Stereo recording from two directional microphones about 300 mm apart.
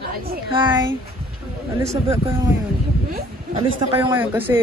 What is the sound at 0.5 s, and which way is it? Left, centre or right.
Speech, centre.